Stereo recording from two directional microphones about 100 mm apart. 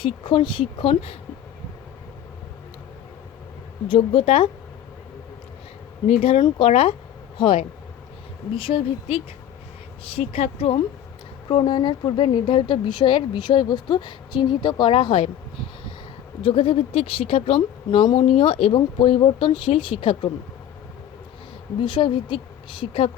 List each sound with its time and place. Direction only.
0.0 s speech: 60° left (ahead or behind)
3.8 s speech: 65° left (ahead or behind)
6.1 s speech: 90° left
6.6 s speech: 75° left (ahead or behind)
7.3 s speech: 55° left (ahead or behind); by 10.8 s 75° left (ahead or behind)
11.4 s speech: 50° left (ahead or behind)
16.4 s speech: 65° left (ahead or behind)
18.3 s speech: 70° left (ahead or behind)
21.8 s speech: 55° left (ahead or behind)